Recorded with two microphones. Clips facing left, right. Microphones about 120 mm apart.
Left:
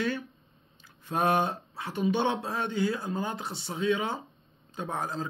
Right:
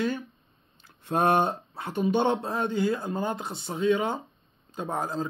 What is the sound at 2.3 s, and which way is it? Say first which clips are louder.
Speech: right 3 dB; 25° right (ahead or behind).